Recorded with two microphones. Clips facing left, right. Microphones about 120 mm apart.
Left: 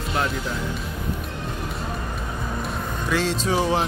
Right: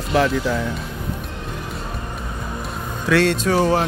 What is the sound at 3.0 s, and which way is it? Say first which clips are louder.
Speech: right 7 dB; 75° right (ahead or behind).